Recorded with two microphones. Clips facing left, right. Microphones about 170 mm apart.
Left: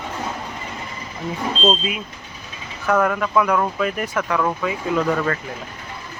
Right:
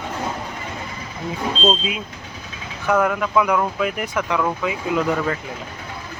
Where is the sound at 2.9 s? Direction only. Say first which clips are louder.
Even; 10° right (ahead or behind).